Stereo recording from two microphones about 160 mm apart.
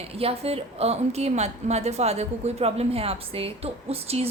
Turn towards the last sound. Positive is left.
turn(degrees=-40)  # may be behind; listen again after turning